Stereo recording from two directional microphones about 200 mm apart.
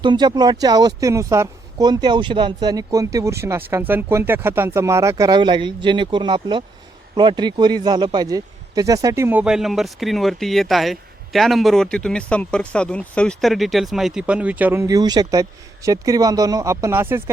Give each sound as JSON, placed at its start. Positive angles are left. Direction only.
{"t": 0.0, "sound": "speech", "side_deg": -20}